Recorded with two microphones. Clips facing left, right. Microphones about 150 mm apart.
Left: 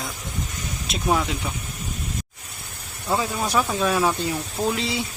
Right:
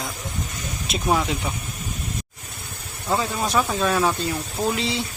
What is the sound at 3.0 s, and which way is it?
Speech, centre (ahead or behind).